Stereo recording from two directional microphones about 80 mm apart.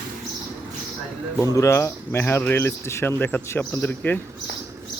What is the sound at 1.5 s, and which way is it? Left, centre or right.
Speech, left.